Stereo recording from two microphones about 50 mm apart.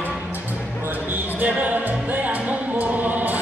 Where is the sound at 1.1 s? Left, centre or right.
Right.